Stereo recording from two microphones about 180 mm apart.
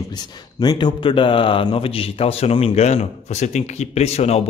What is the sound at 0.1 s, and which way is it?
Speech, 25° left (ahead or behind).